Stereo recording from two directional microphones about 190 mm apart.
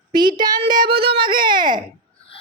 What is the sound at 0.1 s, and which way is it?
A woman's voice, 25° right (ahead or behind).